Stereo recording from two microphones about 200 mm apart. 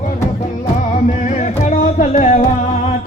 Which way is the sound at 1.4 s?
40° left (ahead or behind).